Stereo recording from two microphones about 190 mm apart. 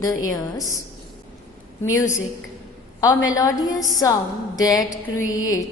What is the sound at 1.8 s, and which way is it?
A woman's voice, 15° left (ahead or behind).